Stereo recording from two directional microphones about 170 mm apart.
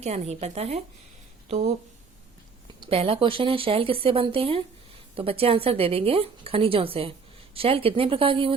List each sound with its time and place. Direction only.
0.0 s speech: 40° right (ahead or behind)
2.8 s speech: 35° right (ahead or behind)